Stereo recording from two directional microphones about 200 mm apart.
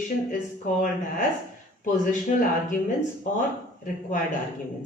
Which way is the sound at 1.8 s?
40° left (ahead or behind).